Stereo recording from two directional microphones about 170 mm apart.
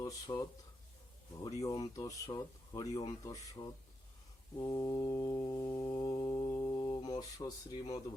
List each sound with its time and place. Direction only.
0.0 s speech: 20° left (ahead or behind)
4.6 s mantra: 25° left (ahead or behind)